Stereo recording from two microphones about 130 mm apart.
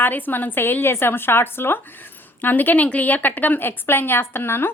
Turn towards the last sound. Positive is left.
turn(degrees=20)  # may be behind; listen again after turning